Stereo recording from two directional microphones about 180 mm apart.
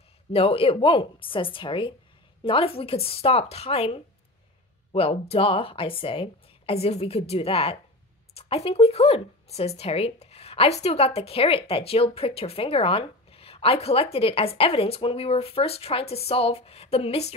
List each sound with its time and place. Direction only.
0.3 s a woman's voice: 30° left (ahead or behind)